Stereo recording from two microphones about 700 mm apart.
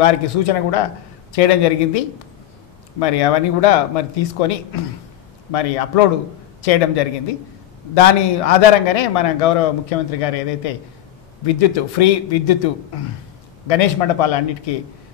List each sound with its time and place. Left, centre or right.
0.0 s a man's voice: left